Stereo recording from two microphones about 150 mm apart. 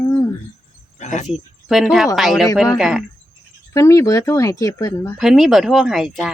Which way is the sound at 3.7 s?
20° left (ahead or behind).